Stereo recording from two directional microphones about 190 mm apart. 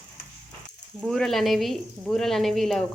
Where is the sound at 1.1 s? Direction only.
Centre (ahead or behind).